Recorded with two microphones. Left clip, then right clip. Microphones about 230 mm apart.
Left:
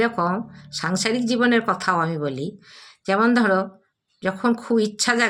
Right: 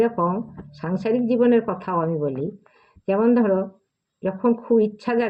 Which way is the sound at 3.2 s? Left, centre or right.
Left.